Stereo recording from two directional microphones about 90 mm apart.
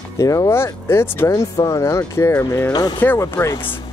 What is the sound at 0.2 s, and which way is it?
Speech, 35° left (ahead or behind).